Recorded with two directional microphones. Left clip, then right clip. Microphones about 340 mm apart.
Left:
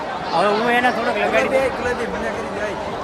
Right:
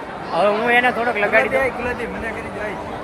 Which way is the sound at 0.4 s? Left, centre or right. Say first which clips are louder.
Right 2 dB; centre.